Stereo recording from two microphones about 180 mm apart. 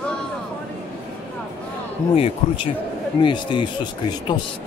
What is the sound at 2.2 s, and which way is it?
Speech, 30° left (ahead or behind).